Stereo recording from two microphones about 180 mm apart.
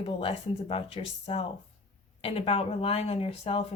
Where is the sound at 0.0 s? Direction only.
30° left (ahead or behind).